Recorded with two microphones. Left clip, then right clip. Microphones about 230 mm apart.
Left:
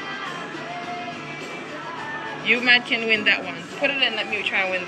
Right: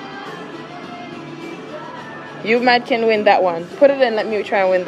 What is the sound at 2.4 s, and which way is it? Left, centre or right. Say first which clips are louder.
A woman's voice: right 3 dB; centre.